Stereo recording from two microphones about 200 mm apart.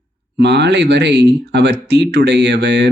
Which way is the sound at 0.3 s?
60° right (ahead or behind).